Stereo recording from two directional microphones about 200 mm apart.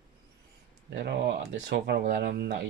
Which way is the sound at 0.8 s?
55° right (ahead or behind).